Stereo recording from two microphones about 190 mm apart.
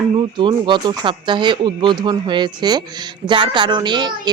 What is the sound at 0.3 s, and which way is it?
Speech, 25° right (ahead or behind).